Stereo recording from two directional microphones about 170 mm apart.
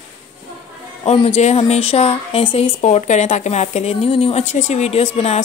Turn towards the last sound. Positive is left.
turn(degrees=40)  # may be behind; listen again after turning